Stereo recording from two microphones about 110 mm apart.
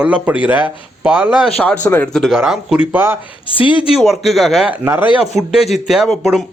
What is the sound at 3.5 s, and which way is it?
Speech, 50° left (ahead or behind).